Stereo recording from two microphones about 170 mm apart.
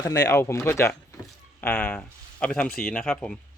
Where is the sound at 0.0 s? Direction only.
20° left (ahead or behind).